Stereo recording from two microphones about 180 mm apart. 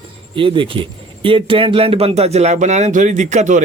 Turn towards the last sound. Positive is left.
turn(degrees=-45)  # may be behind; listen again after turning